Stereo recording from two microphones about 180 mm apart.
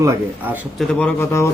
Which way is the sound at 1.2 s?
15° left (ahead or behind).